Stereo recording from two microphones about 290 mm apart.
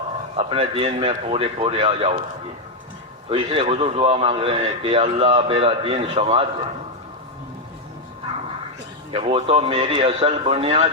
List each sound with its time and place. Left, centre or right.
0.3 s a man's voice: centre
3.2 s a man's voice: centre
9.1 s a man's voice: centre